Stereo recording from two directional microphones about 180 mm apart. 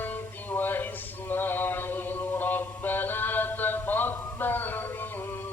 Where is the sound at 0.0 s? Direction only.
10° left (ahead or behind).